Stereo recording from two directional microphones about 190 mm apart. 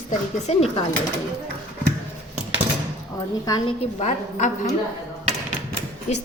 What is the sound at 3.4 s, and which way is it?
Speech, 20° left (ahead or behind).